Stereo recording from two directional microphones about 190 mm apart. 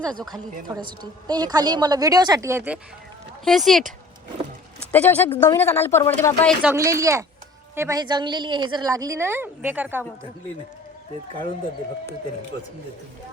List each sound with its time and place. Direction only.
1.3 s a woman's voice: 20° right (ahead or behind)
3.4 s speech: centre (ahead or behind)
4.9 s speech: 10° left (ahead or behind)
6.6 s a woman's voice: 10° right (ahead or behind)